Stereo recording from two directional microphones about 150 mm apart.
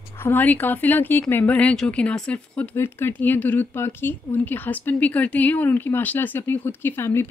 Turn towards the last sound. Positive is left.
turn(degrees=15)  # may be behind; listen again after turning